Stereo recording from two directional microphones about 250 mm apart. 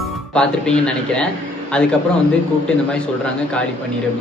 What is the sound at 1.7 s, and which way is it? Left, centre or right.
Speech, centre.